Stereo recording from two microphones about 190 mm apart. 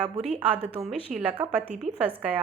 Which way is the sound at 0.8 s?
5° right (ahead or behind).